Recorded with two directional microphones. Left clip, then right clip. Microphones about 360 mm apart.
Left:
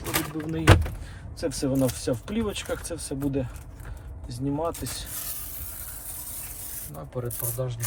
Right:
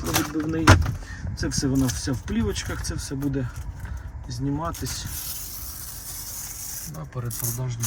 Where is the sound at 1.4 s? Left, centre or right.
Centre.